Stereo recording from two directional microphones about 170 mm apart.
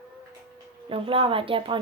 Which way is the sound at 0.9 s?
30° right (ahead or behind).